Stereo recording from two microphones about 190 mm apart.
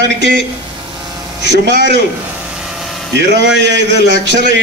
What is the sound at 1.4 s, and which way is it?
Speech, 70° right (ahead or behind).